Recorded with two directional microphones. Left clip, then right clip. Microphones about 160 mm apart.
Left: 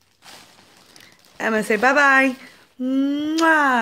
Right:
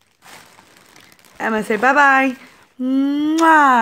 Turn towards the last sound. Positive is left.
turn(degrees=-30)  # may be behind; listen again after turning